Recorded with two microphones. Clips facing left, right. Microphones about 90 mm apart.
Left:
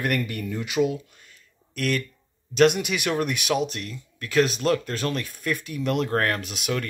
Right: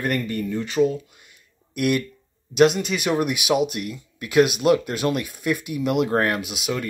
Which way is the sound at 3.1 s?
10° right (ahead or behind).